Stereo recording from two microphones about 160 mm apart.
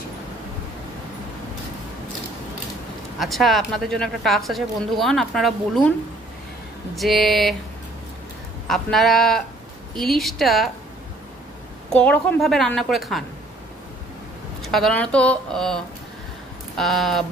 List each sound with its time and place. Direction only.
3.2 s speech: centre (ahead or behind)
7.0 s speech: centre (ahead or behind)
8.6 s speech: centre (ahead or behind)
11.9 s speech: 10° left (ahead or behind)
14.6 s speech: centre (ahead or behind)